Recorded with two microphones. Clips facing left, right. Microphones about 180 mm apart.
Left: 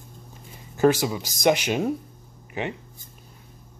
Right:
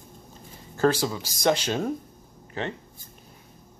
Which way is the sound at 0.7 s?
15° left (ahead or behind).